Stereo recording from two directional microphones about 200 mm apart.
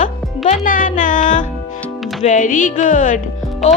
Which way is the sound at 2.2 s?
40° left (ahead or behind).